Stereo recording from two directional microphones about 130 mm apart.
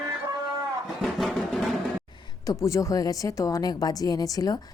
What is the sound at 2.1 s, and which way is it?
A woman's voice, 35° left (ahead or behind).